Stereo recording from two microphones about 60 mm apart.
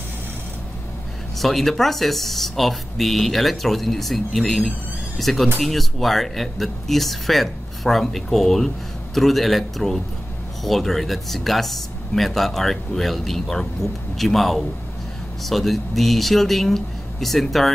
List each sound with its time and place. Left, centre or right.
1.4 s speech: centre